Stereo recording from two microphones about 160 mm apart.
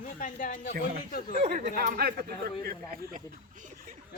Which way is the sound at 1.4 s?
50° right (ahead or behind).